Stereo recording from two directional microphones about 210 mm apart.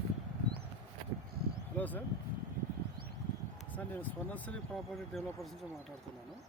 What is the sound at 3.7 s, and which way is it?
Speech, 10° left (ahead or behind).